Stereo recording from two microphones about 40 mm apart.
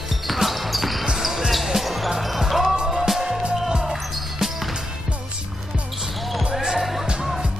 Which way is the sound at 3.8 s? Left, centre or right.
Centre.